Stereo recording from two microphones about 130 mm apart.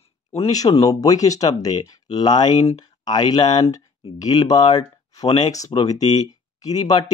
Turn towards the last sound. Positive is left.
turn(degrees=30)  # may be behind; listen again after turning